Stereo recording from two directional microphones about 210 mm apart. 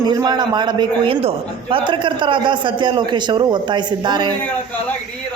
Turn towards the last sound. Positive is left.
turn(degrees=-20)  # may be behind; listen again after turning